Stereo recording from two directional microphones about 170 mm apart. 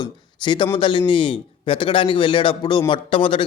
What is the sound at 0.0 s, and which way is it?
Speech, 25° left (ahead or behind).